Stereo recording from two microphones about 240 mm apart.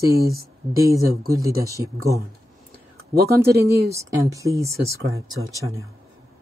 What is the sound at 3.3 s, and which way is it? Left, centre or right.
Speech, centre.